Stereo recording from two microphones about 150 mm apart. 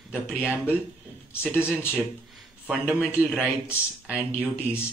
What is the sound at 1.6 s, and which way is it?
Speech, 15° left (ahead or behind).